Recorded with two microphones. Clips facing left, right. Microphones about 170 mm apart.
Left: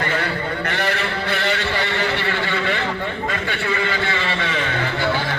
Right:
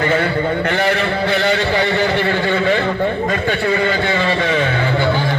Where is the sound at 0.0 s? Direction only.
50° right (ahead or behind).